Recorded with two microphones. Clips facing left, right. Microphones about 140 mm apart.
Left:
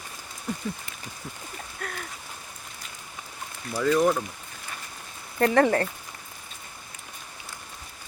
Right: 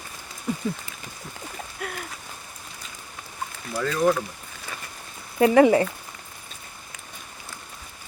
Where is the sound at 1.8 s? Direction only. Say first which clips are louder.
Right 3 dB; 5° right (ahead or behind).